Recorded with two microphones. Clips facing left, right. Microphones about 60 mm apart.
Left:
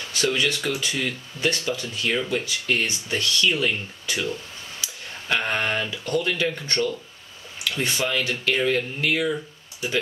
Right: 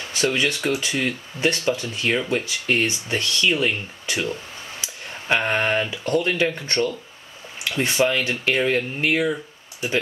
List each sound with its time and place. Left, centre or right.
0.2 s speech: centre